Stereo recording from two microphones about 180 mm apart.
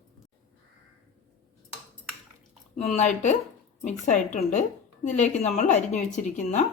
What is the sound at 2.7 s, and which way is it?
A woman's voice, 35° left (ahead or behind).